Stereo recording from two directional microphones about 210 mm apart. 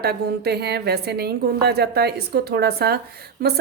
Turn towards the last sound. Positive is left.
turn(degrees=-45)  # may be behind; listen again after turning